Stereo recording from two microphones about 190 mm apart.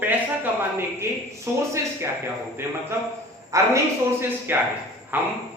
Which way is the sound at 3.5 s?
15° right (ahead or behind).